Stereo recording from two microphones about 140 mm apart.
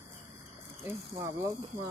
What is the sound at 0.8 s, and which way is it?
Speech, 20° right (ahead or behind).